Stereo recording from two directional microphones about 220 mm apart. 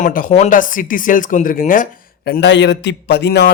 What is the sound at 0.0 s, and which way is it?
Speech, 40° left (ahead or behind).